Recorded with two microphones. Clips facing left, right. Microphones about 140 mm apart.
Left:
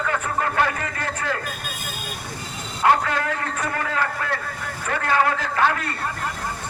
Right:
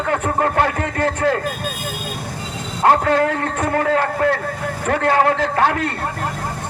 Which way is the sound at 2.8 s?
45° right (ahead or behind).